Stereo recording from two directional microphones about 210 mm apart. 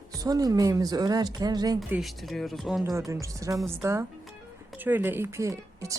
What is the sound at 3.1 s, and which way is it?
Speech, 15° right (ahead or behind).